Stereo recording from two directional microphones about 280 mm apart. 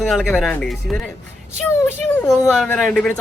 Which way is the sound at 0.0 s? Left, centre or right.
Centre.